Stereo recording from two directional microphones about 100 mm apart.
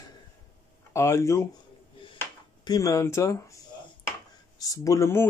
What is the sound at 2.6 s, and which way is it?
Speech, 40° left (ahead or behind).